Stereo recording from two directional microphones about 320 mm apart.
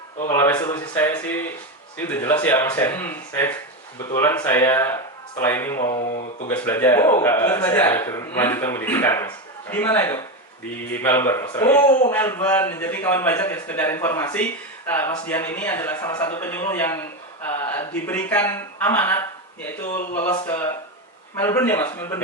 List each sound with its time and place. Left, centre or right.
0.3 s a man's voice: centre
6.0 s speech: left
6.5 s a man's voice: centre